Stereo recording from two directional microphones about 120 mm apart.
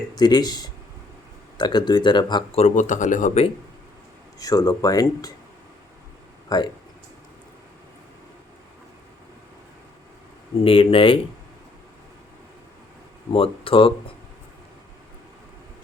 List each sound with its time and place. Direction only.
0.1 s speech: 35° left (ahead or behind)
2.6 s speech: 80° left
4.4 s speech: 30° left (ahead or behind)
6.5 s speech: 30° left (ahead or behind)
10.6 s speech: 50° left (ahead or behind)
13.3 s speech: 50° left (ahead or behind)